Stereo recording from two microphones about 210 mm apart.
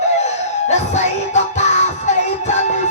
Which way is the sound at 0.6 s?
35° left (ahead or behind).